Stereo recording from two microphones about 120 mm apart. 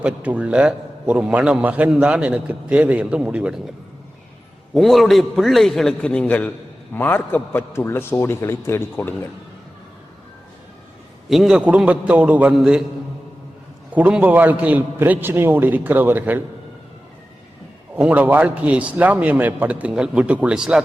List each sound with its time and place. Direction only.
0.0 s a man's voice: 10° right (ahead or behind)
4.7 s a man's voice: centre (ahead or behind); by 9.1 s 20° left (ahead or behind)
11.3 s a man's voice: centre (ahead or behind)
13.9 s a man's voice: 15° right (ahead or behind)
17.9 s a man's voice: 10° right (ahead or behind)